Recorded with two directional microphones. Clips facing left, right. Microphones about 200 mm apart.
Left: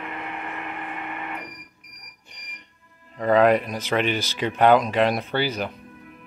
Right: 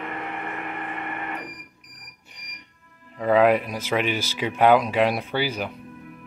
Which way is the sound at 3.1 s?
5° right (ahead or behind).